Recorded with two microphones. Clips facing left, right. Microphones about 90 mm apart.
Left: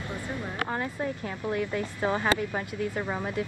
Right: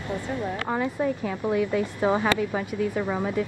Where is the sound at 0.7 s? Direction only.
5° right (ahead or behind).